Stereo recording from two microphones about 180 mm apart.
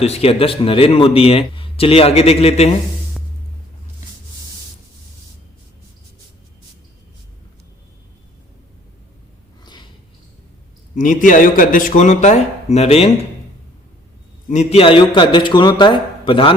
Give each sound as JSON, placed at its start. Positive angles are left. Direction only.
{"t": 0.0, "sound": "speech", "side_deg": 35}
{"t": 10.9, "sound": "speech", "side_deg": 45}
{"t": 14.5, "sound": "a man's voice", "side_deg": 40}